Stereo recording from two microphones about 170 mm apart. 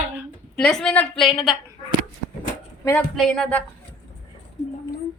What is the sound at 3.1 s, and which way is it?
Speech, centre (ahead or behind).